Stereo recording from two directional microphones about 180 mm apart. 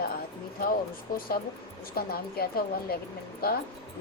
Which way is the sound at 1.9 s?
55° left (ahead or behind).